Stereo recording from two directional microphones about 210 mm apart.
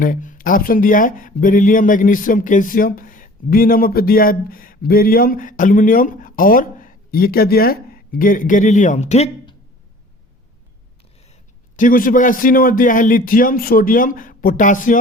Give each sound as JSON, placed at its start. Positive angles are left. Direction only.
{"t": 0.0, "sound": "speech", "side_deg": 40}
{"t": 11.8, "sound": "speech", "side_deg": 40}